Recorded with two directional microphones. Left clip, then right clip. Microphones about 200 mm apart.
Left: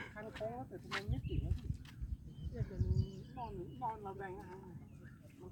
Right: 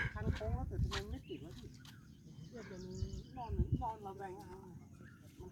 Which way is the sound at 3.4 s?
20° right (ahead or behind).